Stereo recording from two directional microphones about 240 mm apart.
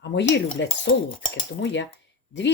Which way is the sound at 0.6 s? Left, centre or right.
Left.